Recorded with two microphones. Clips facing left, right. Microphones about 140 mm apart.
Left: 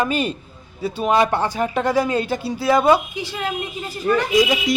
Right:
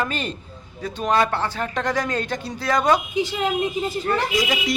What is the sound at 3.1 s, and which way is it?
Speech, 20° right (ahead or behind).